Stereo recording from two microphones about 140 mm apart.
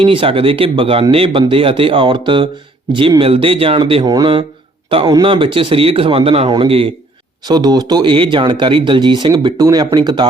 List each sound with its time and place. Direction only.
0.0 s speech: 40° right (ahead or behind)
4.0 s speech: 30° right (ahead or behind)
7.4 s speech: 30° right (ahead or behind)